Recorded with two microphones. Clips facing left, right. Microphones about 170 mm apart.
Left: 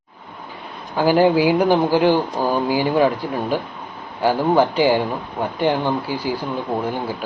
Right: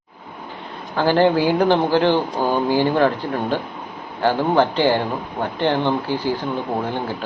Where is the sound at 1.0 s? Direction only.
10° left (ahead or behind).